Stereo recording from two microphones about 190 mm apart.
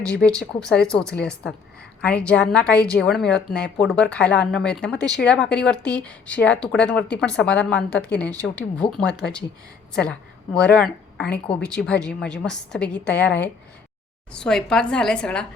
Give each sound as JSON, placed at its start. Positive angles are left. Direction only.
{"t": 0.1, "sound": "a woman's voice", "side_deg": 5}
{"t": 8.3, "sound": "speech", "side_deg": -15}
{"t": 8.8, "sound": "a woman's voice", "side_deg": 5}